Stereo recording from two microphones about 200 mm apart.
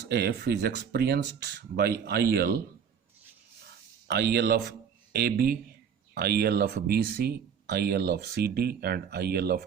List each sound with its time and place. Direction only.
0.1 s speech: 55° right (ahead or behind)
4.1 s speech: 55° right (ahead or behind)